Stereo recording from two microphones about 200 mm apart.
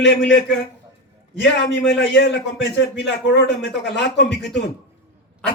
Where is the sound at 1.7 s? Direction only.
65° left (ahead or behind).